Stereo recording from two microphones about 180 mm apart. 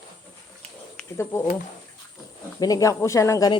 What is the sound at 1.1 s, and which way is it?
Speech, 15° left (ahead or behind).